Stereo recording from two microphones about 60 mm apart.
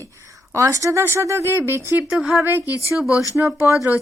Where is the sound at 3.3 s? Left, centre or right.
Right.